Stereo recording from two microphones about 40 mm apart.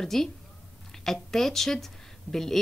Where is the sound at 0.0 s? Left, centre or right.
Centre.